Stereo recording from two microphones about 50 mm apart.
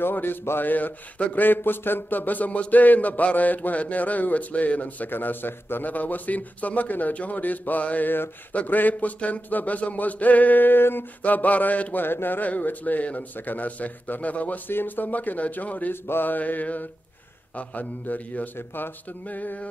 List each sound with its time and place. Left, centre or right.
0.0 s a man's voice: left
11.2 s a man's voice: left
12.0 s a man's voice: left
14.7 s a man's voice: left
15.9 s a man's voice: left